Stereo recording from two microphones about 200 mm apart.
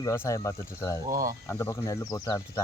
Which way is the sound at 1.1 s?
15° right (ahead or behind).